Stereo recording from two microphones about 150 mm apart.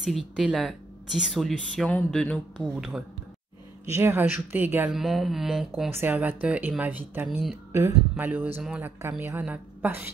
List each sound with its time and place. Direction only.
0.0 s speech: centre (ahead or behind)
3.8 s speech: 15° right (ahead or behind)
4.9 s speech: centre (ahead or behind)
5.9 s speech: 15° right (ahead or behind)